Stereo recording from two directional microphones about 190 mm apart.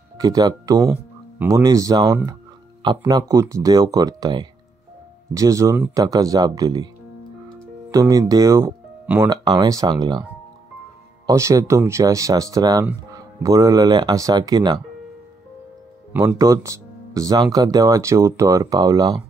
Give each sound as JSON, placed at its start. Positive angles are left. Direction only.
{"t": 0.2, "sound": "speech", "side_deg": -20}
{"t": 7.9, "sound": "speech", "side_deg": -20}
{"t": 9.3, "sound": "speech", "side_deg": -20}
{"t": 11.2, "sound": "speech", "side_deg": -15}
{"t": 16.1, "sound": "speech", "side_deg": -10}